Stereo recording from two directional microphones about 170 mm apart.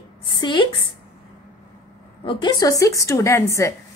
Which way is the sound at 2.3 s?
25° left (ahead or behind).